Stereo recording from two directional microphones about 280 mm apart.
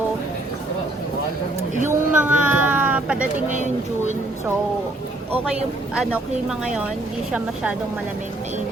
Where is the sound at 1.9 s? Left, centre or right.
Centre.